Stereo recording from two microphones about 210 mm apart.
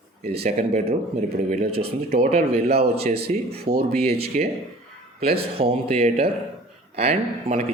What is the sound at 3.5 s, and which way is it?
Speech, 45° right (ahead or behind).